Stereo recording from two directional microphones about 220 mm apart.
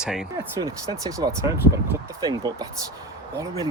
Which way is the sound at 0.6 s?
15° right (ahead or behind).